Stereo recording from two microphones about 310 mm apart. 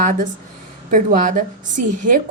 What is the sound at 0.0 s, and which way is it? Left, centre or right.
A woman's voice, right.